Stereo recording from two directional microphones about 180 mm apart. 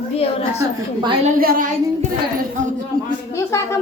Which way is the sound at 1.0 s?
30° right (ahead or behind).